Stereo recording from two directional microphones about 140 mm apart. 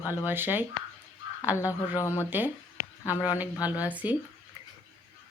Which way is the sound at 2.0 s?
20° left (ahead or behind).